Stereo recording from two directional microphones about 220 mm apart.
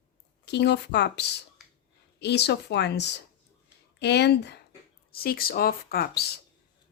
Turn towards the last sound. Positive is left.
turn(degrees=45)  # may be behind; listen again after turning